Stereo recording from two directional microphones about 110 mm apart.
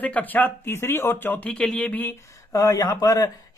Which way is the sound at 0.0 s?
15° left (ahead or behind).